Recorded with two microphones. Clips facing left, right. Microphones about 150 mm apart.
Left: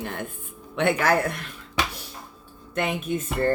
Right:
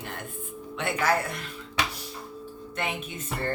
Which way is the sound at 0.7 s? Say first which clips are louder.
Left 5 dB; 60° left (ahead or behind).